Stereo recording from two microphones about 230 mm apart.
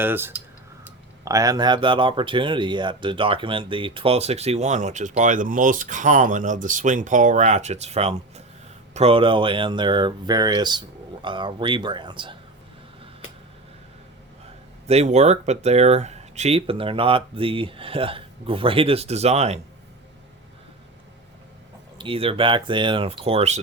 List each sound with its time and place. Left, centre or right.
0.0 s speech: centre
14.8 s speech: right
21.9 s speech: right